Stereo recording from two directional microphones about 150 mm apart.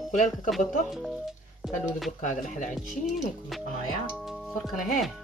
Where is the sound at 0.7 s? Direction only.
Centre (ahead or behind).